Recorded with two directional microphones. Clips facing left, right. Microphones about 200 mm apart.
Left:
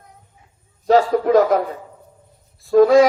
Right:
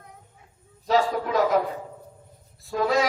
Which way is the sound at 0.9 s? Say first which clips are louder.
Left 8 dB; 45° left (ahead or behind).